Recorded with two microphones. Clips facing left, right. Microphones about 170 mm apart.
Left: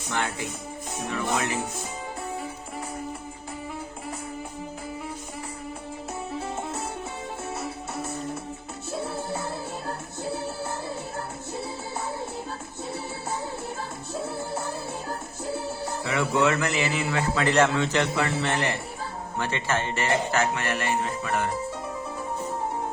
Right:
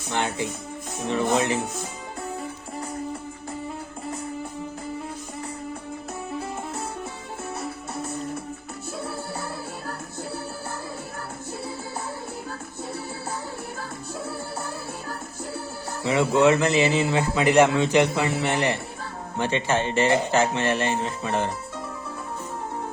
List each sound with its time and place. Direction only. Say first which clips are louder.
0.1 s a man's voice: right 3 dB; 20° right (ahead or behind)
16.0 s a man's voice: right 5 dB; 20° right (ahead or behind)